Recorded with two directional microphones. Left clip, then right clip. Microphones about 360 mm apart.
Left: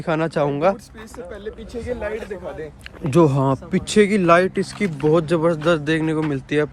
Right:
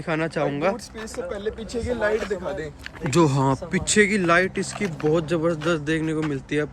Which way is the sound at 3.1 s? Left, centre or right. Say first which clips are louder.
Left 3 dB; centre.